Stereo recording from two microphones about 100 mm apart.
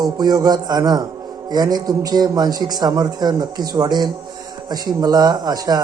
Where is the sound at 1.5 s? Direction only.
40° right (ahead or behind).